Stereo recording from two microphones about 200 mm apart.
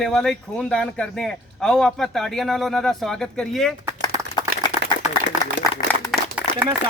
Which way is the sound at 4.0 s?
20° left (ahead or behind).